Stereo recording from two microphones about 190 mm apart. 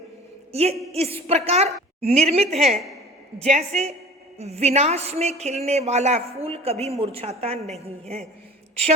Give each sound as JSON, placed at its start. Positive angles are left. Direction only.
{"t": 0.5, "sound": "a woman's voice", "side_deg": -35}